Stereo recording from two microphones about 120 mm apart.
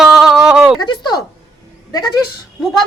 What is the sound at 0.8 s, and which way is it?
Speech, 40° left (ahead or behind).